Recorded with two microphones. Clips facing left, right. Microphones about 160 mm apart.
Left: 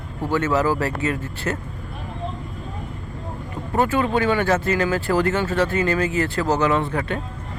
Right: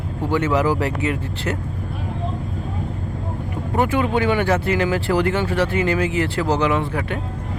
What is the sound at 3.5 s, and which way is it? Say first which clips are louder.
Speech: even; 15° right (ahead or behind).